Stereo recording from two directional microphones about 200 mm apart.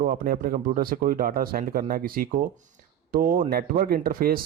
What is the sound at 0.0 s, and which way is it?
Speech, 45° right (ahead or behind).